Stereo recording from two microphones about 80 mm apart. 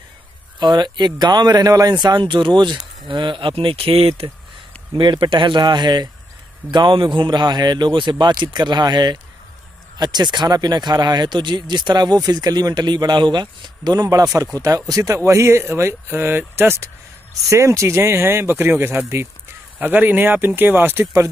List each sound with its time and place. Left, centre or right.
0.6 s speech: right
2.0 s speech: right
3.1 s speech: right
6.7 s speech: right